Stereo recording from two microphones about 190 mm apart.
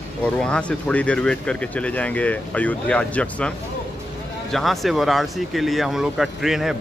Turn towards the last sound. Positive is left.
turn(degrees=0)  # may be behind; listen again after turning